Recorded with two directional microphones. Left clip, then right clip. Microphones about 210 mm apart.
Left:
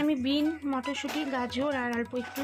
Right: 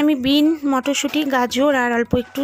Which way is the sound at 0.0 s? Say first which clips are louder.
Right 11 dB; 45° right (ahead or behind).